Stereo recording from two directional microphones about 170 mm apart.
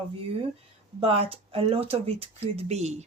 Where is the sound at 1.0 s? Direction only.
35° right (ahead or behind).